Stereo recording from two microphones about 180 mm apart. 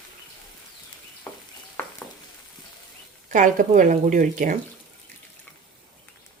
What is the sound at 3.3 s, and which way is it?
A woman's voice, 45° right (ahead or behind).